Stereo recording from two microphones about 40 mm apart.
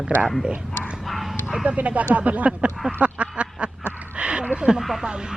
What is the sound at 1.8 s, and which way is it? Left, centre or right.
Speech, right.